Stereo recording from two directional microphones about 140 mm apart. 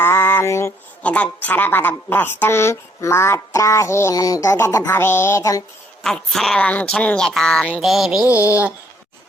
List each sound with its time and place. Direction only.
0.0 s a sound: 15° left (ahead or behind)
1.0 s speech: 10° left (ahead or behind)
6.0 s speech: 5° left (ahead or behind)